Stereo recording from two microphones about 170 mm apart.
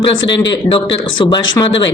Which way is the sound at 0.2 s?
90° left.